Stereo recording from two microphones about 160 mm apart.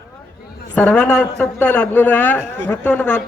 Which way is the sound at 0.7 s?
10° left (ahead or behind).